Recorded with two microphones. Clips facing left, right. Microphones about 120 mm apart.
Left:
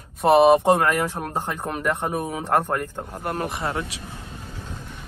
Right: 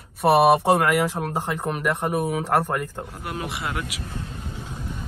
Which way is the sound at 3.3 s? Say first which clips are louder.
Left 4 dB; 45° left (ahead or behind).